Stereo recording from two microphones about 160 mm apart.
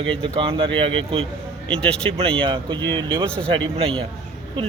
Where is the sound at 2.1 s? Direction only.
35° right (ahead or behind).